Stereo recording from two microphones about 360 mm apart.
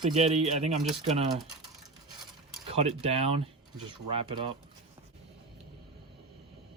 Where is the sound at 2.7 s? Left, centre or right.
Centre.